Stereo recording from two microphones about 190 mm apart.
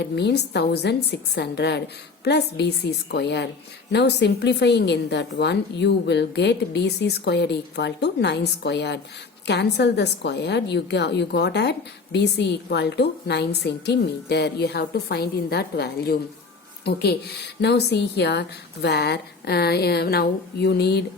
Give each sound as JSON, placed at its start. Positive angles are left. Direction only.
{"t": 0.0, "sound": "a woman's voice", "side_deg": 60}